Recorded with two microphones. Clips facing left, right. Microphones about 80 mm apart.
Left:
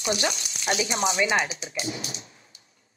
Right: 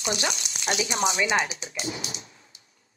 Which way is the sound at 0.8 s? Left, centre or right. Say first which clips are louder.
Even; right.